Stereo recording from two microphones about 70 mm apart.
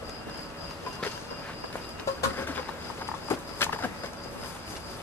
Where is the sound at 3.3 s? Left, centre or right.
Left.